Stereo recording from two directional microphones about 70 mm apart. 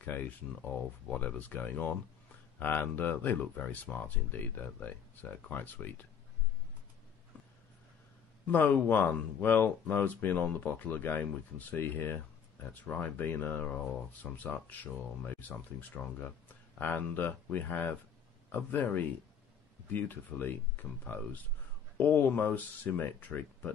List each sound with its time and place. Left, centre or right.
0.0 s speech: left
8.5 s speech: left
19.9 s speech: left